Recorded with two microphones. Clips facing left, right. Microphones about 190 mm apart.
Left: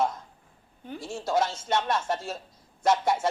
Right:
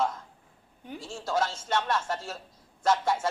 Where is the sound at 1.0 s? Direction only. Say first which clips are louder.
Left 3 dB; 20° left (ahead or behind).